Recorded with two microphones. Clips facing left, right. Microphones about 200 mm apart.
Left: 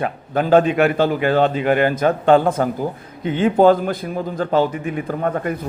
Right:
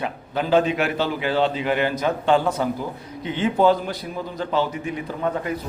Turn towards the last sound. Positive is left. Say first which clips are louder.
# left 4 dB
turn(degrees=50)  # may be behind; listen again after turning